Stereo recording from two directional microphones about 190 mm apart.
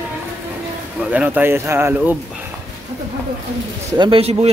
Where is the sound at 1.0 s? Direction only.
5° right (ahead or behind).